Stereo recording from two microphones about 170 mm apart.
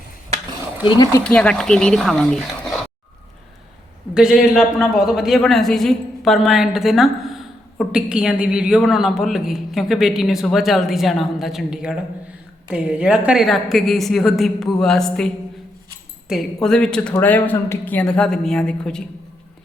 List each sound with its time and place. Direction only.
0.9 s speech: 20° left (ahead or behind)
1.2 s a man's voice: 5° left (ahead or behind)
4.1 s a man's voice: 5° right (ahead or behind)
16.3 s a man's voice: 5° left (ahead or behind)